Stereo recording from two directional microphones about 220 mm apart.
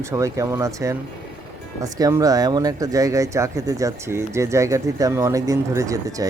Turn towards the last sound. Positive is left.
turn(degrees=-15)  # may be behind; listen again after turning